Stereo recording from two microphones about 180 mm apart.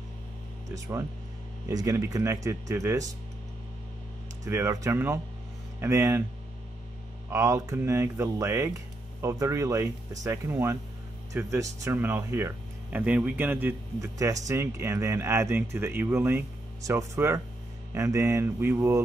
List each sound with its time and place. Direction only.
0.7 s speech: 20° right (ahead or behind)
4.5 s speech: 15° right (ahead or behind)
7.2 s speech: 15° right (ahead or behind)